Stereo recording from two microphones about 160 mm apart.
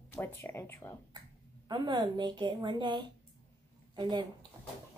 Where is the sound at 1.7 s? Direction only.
30° right (ahead or behind).